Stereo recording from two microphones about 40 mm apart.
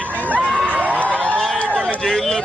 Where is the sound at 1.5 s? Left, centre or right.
Left.